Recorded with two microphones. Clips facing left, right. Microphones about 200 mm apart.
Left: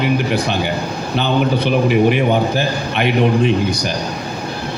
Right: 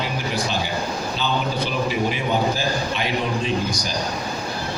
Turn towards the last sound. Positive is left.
turn(degrees=60)  # may be behind; listen again after turning